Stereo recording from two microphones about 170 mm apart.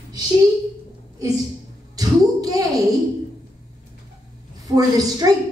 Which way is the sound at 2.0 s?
20° right (ahead or behind).